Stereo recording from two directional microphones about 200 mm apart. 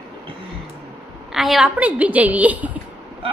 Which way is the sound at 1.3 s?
Centre (ahead or behind).